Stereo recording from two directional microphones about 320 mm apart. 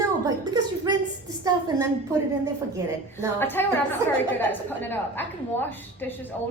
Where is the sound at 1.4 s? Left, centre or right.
Centre.